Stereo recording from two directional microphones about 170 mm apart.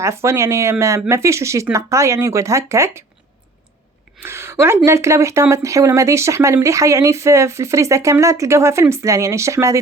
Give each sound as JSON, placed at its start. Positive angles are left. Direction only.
{"t": 0.0, "sound": "speech", "side_deg": -15}
{"t": 4.2, "sound": "a woman's voice", "side_deg": -15}